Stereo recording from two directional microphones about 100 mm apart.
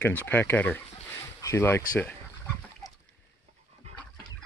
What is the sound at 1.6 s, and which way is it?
Speech, 15° left (ahead or behind).